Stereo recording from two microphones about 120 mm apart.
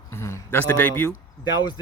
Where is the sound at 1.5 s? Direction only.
35° left (ahead or behind).